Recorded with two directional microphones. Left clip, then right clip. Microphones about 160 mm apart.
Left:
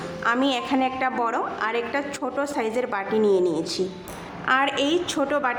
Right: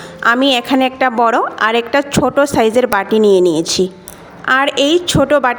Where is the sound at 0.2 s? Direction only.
50° right (ahead or behind).